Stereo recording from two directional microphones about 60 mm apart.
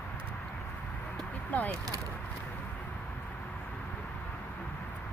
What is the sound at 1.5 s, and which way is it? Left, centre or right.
Speech, left.